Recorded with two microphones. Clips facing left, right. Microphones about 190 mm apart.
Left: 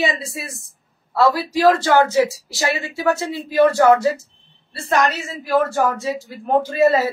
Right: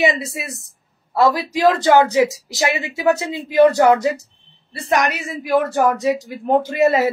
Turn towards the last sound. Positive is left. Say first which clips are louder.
# even
turn(degrees=-20)  # may be behind; listen again after turning